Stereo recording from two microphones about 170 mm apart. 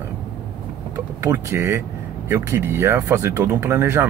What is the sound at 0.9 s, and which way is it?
Speech, 20° right (ahead or behind).